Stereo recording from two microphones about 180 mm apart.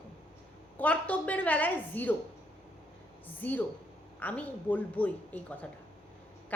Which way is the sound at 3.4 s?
10° left (ahead or behind).